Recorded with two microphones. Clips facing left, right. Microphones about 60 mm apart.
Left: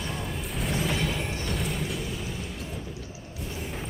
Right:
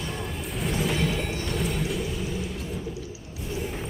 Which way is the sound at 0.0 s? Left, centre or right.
Centre.